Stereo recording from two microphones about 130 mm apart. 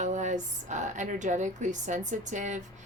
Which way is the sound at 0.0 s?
70° right (ahead or behind).